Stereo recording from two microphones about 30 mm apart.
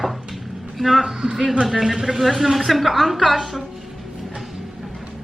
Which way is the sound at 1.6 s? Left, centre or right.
Centre.